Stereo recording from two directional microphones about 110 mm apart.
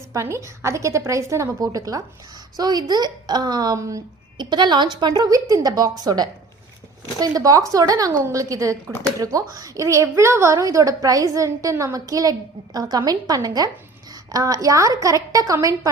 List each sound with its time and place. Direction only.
0.1 s a woman's voice: 25° right (ahead or behind)
4.4 s a woman's voice: 40° right (ahead or behind)